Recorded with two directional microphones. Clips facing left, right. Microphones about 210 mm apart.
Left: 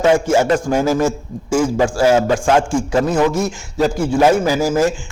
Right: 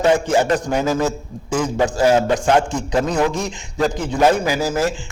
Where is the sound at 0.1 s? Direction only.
10° left (ahead or behind).